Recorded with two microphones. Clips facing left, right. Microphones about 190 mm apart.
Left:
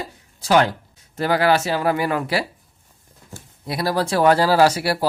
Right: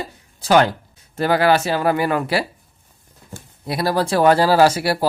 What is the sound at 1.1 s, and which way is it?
Speech, 55° right (ahead or behind).